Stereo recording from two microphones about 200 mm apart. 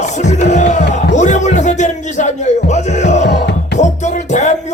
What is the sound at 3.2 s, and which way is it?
Music, 60° left (ahead or behind).